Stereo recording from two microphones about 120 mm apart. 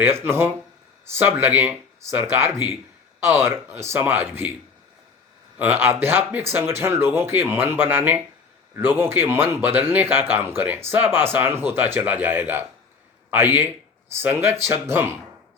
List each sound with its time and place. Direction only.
0.0 s speech: 20° right (ahead or behind)
5.5 s speech: 15° right (ahead or behind)